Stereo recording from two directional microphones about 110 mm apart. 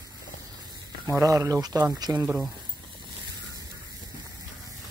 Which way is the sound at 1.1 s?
30° right (ahead or behind).